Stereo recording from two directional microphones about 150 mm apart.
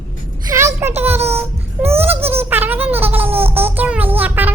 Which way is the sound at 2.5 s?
15° right (ahead or behind).